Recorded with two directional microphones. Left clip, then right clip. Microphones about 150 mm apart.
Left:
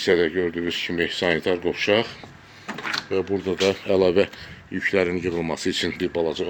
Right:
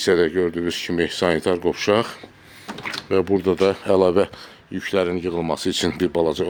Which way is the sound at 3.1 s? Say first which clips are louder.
Right 8 dB; 90° right.